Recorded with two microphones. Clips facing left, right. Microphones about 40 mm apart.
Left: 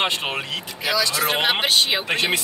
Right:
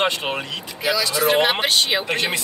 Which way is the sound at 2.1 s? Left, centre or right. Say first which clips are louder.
Left 1 dB; left.